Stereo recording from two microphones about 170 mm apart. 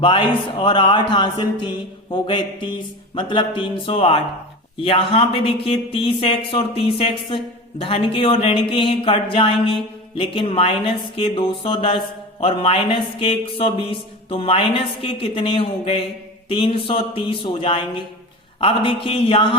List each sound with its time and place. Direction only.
0.6 s speech: 30° left (ahead or behind)